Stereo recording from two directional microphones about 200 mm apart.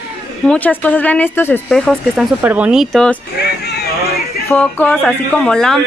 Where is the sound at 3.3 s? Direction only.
55° left (ahead or behind).